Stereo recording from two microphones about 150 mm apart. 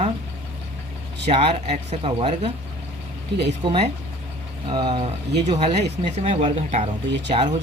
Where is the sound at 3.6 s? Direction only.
30° right (ahead or behind).